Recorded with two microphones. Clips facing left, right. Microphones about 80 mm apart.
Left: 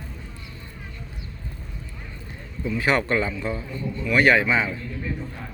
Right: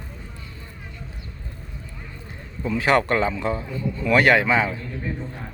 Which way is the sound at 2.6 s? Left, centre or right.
Right.